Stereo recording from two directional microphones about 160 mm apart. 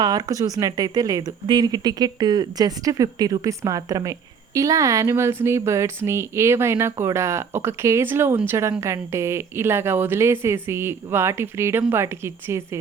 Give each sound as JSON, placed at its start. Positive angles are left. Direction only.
{"t": 0.0, "sound": "a woman's voice", "side_deg": -25}